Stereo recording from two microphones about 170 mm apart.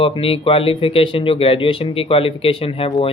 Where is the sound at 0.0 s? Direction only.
35° left (ahead or behind).